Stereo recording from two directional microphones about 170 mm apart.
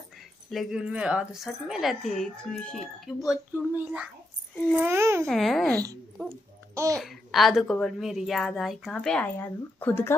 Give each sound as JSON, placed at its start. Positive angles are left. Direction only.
{"t": 0.5, "sound": "a child's voice", "side_deg": 0}
{"t": 5.2, "sound": "speech", "side_deg": 0}
{"t": 6.7, "sound": "babbling", "side_deg": -15}
{"t": 7.0, "sound": "speech", "side_deg": 0}